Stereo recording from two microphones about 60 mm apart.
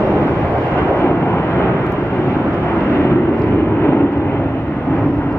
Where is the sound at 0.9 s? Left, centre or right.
Left.